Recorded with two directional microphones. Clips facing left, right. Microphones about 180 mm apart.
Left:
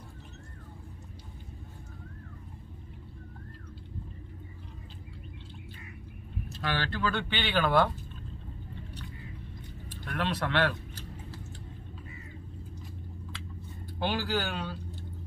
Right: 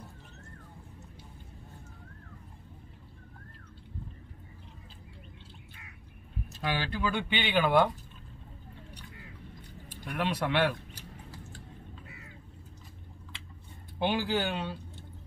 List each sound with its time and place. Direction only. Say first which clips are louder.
6.6 s speech: even; 15° right (ahead or behind)
10.0 s speech: right 1 dB; 10° right (ahead or behind)
13.9 s speech: right 2 dB; 20° right (ahead or behind)